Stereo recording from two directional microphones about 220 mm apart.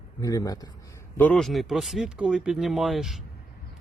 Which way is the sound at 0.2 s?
15° left (ahead or behind).